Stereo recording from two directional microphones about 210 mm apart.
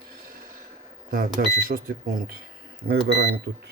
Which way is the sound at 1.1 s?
40° right (ahead or behind).